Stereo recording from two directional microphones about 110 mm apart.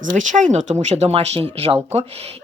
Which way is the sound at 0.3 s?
90° right.